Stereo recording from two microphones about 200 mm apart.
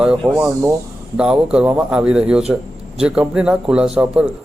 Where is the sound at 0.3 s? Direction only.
5° right (ahead or behind).